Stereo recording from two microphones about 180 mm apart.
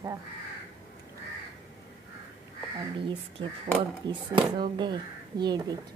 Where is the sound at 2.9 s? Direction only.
25° right (ahead or behind).